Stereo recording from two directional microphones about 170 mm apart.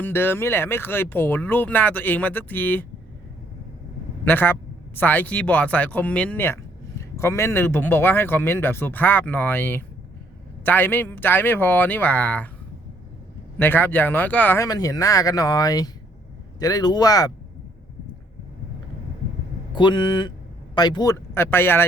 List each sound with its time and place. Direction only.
0.0 s speech: 10° left (ahead or behind)
4.3 s speech: 10° left (ahead or behind)
13.6 s speech: 10° left (ahead or behind)
19.7 s speech: 25° left (ahead or behind)